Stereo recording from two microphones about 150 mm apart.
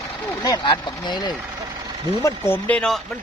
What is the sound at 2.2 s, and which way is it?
Speech, 15° left (ahead or behind).